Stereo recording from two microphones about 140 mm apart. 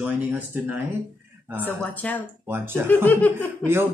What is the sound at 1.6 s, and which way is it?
Speech, 10° left (ahead or behind).